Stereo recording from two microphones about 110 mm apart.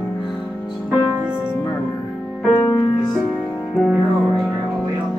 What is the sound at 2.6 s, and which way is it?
Music, 20° left (ahead or behind).